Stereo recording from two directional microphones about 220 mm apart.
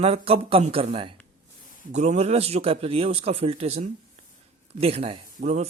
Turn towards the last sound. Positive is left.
turn(degrees=-30)  # may be behind; listen again after turning